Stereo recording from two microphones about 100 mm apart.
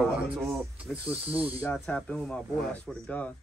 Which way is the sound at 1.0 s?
15° right (ahead or behind).